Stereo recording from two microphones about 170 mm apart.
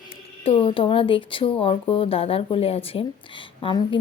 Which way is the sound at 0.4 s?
30° left (ahead or behind).